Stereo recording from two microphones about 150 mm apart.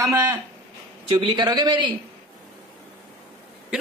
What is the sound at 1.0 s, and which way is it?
Speech, 30° right (ahead or behind).